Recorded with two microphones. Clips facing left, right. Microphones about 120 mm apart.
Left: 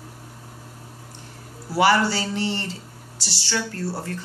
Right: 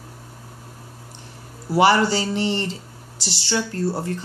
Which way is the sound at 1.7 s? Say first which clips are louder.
Right 2 dB; 20° right (ahead or behind).